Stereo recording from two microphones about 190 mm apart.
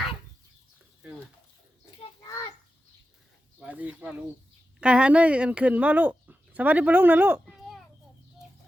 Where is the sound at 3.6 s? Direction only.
10° right (ahead or behind).